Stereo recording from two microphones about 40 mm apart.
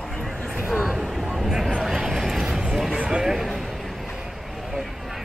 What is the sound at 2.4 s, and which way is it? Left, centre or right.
Vehicle, centre.